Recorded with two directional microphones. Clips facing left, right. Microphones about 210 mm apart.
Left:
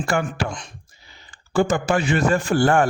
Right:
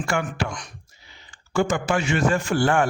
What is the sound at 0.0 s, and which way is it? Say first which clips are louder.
Speech: left 3 dB; 40° left (ahead or behind).